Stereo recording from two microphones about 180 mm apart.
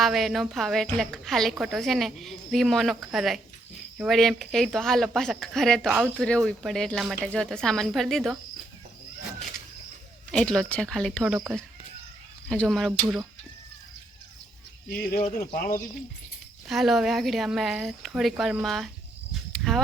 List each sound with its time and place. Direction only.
0.0 s a woman's voice: centre (ahead or behind)
10.3 s a woman's voice: 5° left (ahead or behind)
12.5 s a woman's voice: 5° left (ahead or behind)
15.1 s speech: 55° left (ahead or behind)
16.6 s a woman's voice: centre (ahead or behind)
19.3 s cricket: centre (ahead or behind)